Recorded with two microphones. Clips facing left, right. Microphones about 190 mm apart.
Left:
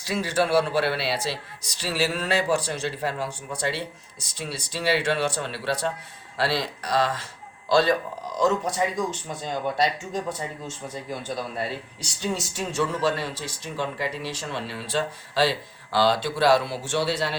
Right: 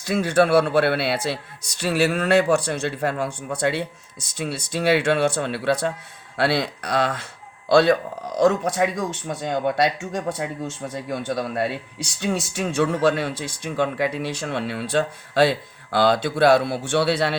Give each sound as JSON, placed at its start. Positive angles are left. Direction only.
{"t": 0.0, "sound": "speech", "side_deg": -55}